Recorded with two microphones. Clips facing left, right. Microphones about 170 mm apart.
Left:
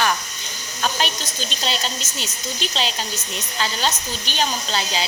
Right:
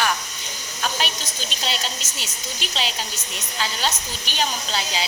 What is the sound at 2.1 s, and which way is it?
Speech, 5° right (ahead or behind).